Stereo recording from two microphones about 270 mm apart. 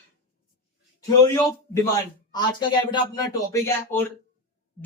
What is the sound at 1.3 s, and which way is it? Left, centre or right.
Speech, centre.